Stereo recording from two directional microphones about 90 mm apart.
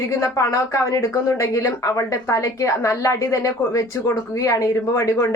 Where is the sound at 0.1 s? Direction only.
35° left (ahead or behind).